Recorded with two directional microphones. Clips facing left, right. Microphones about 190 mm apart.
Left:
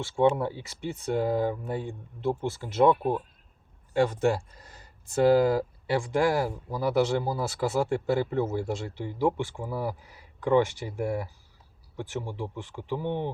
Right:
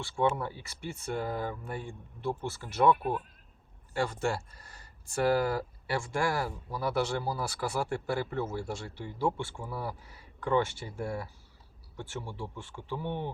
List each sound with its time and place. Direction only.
0.3 s speech: 20° left (ahead or behind)